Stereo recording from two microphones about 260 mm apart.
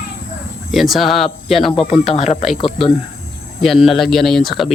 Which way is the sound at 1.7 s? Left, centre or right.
Left.